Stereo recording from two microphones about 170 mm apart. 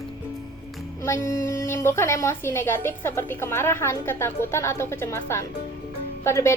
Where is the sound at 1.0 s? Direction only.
15° left (ahead or behind).